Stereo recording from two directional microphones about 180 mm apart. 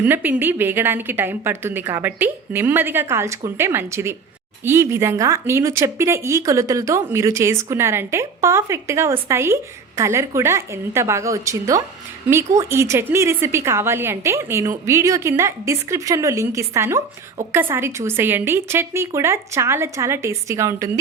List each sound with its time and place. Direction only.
0.0 s speech: 10° right (ahead or behind)